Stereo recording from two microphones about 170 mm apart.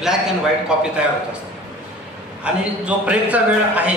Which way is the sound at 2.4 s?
5° right (ahead or behind).